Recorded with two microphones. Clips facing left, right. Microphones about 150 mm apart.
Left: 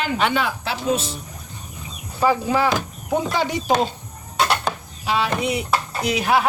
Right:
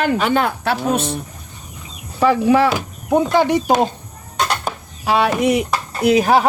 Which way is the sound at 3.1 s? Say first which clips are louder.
Right 7 dB; 50° right (ahead or behind).